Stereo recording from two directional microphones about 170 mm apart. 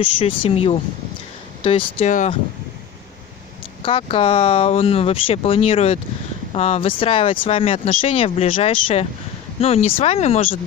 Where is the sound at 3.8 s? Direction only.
30° left (ahead or behind).